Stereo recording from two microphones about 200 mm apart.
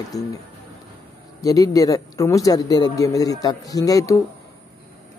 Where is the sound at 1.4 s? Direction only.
15° left (ahead or behind).